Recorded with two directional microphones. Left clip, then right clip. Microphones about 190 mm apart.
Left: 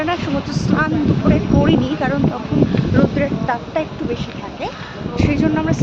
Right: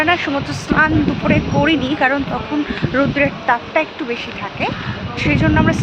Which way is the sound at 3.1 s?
15° right (ahead or behind).